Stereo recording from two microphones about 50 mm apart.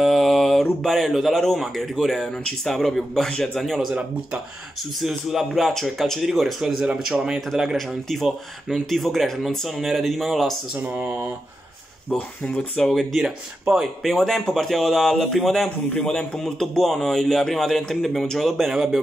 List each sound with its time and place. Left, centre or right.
0.0 s mantra: centre
1.6 s a man's voice: centre
5.0 s a man's voice: centre
5.7 s a man's voice: centre
7.1 s speech: centre
7.7 s a man's voice: centre
10.8 s speech: right
12.1 s a man's voice: centre
13.2 s speech: centre
14.0 s a man's voice: centre
15.9 s a man's voice: centre
18.7 s speech: centre